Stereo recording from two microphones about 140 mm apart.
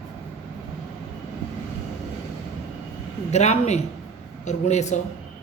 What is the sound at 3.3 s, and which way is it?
A woman's voice, 55° left (ahead or behind).